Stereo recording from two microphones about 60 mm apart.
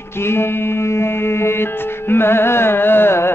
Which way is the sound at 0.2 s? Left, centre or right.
Left.